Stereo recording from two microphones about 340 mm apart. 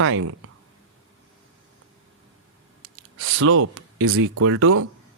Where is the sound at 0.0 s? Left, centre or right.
Right.